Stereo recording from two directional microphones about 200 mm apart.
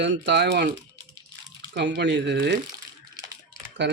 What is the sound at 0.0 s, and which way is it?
Speech, 60° right (ahead or behind).